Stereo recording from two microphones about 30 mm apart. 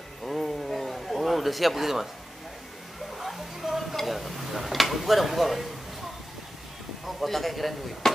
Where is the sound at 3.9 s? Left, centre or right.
Centre.